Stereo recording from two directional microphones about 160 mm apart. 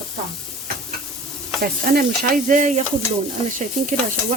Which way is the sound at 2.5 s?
50° right (ahead or behind).